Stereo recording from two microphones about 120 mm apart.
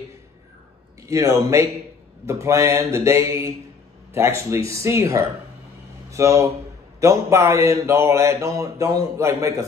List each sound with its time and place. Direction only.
1.0 s speech: 25° right (ahead or behind)